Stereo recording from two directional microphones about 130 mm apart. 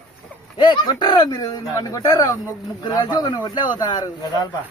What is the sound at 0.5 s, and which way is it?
Speech, 35° left (ahead or behind).